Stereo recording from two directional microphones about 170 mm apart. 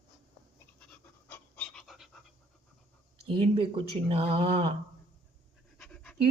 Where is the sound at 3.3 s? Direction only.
30° right (ahead or behind).